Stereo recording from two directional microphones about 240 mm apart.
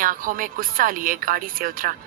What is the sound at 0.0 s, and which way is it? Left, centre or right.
Speech, right.